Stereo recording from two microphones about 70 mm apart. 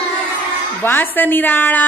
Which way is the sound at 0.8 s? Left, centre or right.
Left.